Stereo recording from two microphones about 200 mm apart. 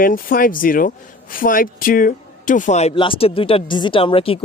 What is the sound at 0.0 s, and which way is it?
A man's voice, 45° left (ahead or behind).